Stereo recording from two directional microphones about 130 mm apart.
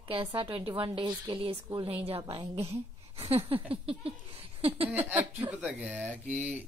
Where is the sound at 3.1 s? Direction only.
50° right (ahead or behind).